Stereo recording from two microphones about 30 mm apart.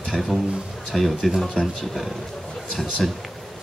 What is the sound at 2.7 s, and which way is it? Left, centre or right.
Speech, centre.